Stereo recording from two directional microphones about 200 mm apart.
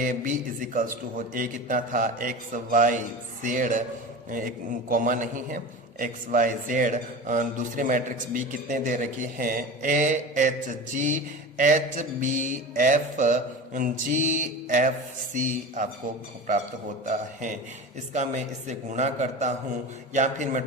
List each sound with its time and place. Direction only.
0.0 s a man's voice: 45° right (ahead or behind)
18.7 s a man's voice: 35° right (ahead or behind)